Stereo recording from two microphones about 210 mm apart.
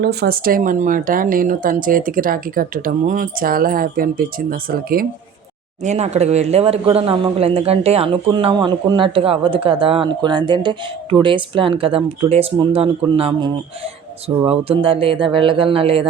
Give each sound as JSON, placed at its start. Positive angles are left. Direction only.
{"t": 0.0, "sound": "speech", "side_deg": -50}
{"t": 5.8, "sound": "speech", "side_deg": -35}